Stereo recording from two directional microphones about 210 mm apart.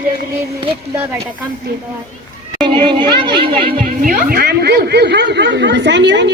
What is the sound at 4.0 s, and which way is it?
Speech, 40° right (ahead or behind).